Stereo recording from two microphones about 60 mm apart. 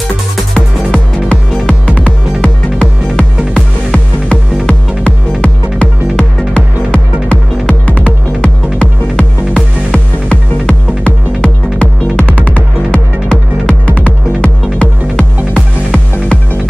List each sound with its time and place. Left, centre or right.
0.6 s music: left